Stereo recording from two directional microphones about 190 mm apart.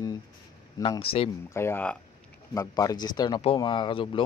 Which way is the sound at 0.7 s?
25° left (ahead or behind).